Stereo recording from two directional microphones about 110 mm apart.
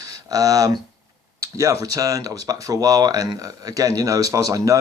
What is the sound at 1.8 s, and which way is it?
Speech, 30° right (ahead or behind).